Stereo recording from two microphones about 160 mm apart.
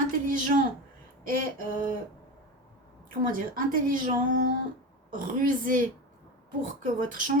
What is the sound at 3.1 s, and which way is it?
Speech, 60° right (ahead or behind).